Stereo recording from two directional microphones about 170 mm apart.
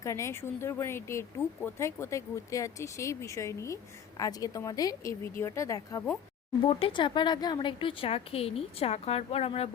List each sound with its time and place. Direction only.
0.0 s speech: 15° left (ahead or behind)
6.7 s a woman's voice: 35° left (ahead or behind)